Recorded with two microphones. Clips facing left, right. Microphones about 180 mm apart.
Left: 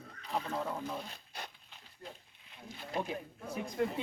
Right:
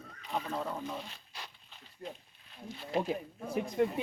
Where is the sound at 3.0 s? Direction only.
30° right (ahead or behind).